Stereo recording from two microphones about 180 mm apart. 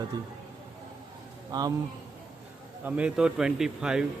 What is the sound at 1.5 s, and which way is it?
Speech, 20° right (ahead or behind).